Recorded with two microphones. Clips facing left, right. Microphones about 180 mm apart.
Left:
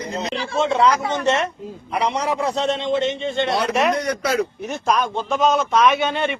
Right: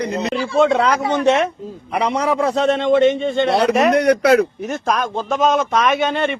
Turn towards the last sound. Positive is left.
turn(degrees=-50)  # may be behind; listen again after turning